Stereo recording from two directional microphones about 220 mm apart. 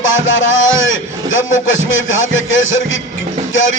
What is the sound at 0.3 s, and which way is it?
A man's voice, 60° left (ahead or behind).